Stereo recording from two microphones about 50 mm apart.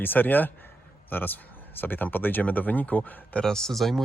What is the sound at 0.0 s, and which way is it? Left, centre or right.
Speech, left.